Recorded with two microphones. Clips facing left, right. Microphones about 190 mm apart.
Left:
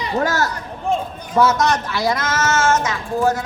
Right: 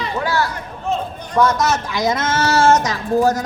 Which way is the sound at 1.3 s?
5° left (ahead or behind).